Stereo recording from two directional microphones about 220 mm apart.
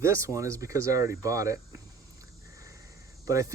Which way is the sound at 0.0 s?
15° right (ahead or behind).